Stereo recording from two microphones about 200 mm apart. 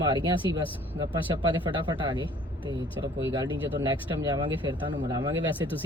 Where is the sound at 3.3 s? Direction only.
20° right (ahead or behind).